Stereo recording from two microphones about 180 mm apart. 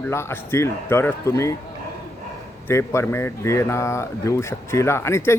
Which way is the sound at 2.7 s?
15° left (ahead or behind).